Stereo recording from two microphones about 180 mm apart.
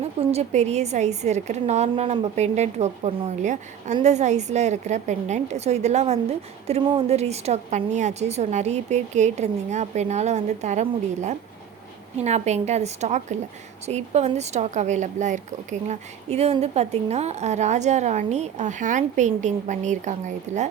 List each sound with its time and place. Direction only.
0.0 s a woman's voice: 35° right (ahead or behind)